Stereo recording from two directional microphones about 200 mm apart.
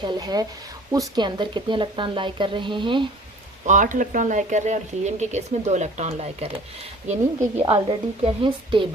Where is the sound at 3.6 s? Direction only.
40° right (ahead or behind).